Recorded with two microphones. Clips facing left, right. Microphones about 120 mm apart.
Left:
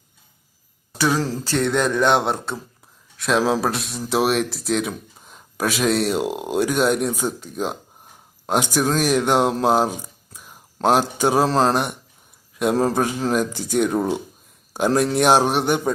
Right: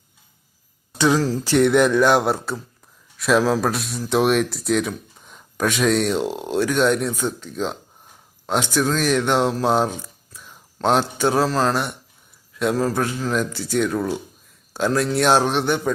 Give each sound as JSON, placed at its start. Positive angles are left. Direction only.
{"t": 0.9, "sound": "speech", "side_deg": -20}
{"t": 11.2, "sound": "speech", "side_deg": 15}
{"t": 11.4, "sound": "a man's voice", "side_deg": 30}
{"t": 11.7, "sound": "speech", "side_deg": 15}